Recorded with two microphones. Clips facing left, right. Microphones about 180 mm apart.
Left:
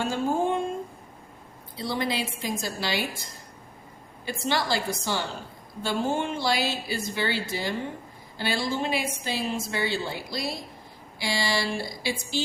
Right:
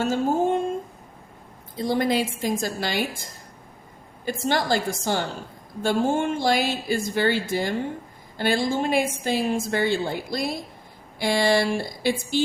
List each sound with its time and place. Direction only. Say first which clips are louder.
0.0 s a woman's voice: right 4 dB; 45° right (ahead or behind)
1.7 s a woman's voice: right 6 dB; 45° right (ahead or behind)
4.3 s a woman's voice: right 4 dB; 45° right (ahead or behind)